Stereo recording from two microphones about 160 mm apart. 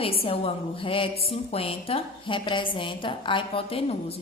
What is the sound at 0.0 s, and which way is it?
A woman's voice, 35° left (ahead or behind).